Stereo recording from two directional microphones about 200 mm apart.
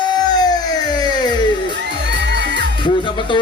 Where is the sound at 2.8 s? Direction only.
25° left (ahead or behind).